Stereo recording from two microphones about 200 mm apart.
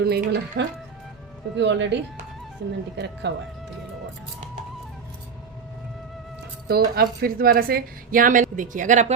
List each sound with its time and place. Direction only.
0.0 s a woman's voice: 55° right (ahead or behind)
1.5 s speech: 65° right (ahead or behind)
3.0 s speech: 60° right (ahead or behind)
6.7 s a woman's voice: 50° right (ahead or behind)